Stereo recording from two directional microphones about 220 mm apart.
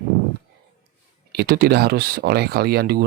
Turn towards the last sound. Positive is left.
turn(degrees=-45)  # may be behind; listen again after turning